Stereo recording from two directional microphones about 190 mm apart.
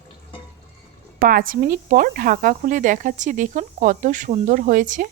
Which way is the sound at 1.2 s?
50° right (ahead or behind).